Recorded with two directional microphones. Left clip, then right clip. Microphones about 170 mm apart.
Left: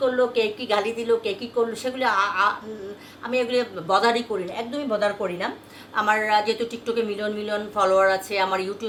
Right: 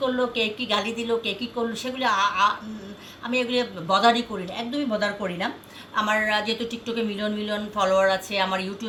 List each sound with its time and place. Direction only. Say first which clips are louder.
0.0 s a woman's voice: left 3 dB; 20° left (ahead or behind)